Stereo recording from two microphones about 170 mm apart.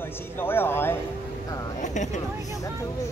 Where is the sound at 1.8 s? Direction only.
45° left (ahead or behind).